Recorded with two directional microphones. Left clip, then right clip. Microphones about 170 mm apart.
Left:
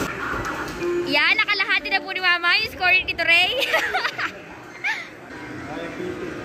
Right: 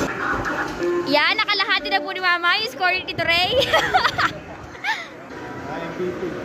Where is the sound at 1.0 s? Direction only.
20° right (ahead or behind).